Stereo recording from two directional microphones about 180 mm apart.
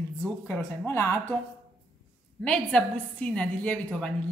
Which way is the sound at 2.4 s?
5° left (ahead or behind).